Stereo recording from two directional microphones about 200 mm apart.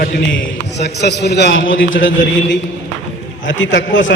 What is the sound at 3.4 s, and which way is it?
Speech, 70° left (ahead or behind).